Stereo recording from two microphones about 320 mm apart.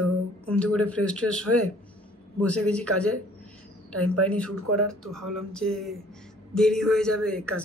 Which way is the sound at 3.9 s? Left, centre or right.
Right.